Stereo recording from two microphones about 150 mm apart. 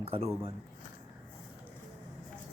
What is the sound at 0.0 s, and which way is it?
Speech, 40° right (ahead or behind).